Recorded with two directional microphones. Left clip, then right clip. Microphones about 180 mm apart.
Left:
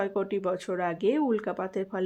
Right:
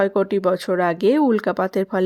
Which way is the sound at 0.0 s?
45° right (ahead or behind).